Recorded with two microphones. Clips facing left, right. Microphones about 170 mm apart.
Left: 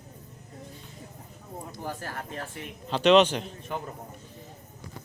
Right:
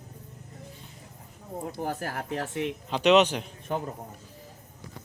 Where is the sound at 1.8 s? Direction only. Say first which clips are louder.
Right 3 dB; 70° right (ahead or behind).